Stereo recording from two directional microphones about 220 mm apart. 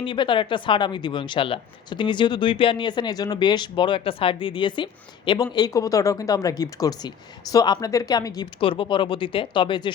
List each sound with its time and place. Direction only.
0.0 s speech: 20° left (ahead or behind)